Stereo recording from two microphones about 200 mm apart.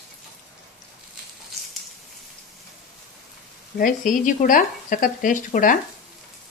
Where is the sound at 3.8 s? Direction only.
40° left (ahead or behind).